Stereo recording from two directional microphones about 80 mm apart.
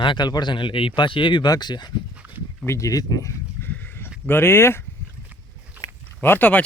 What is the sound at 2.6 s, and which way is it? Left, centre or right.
Speech, left.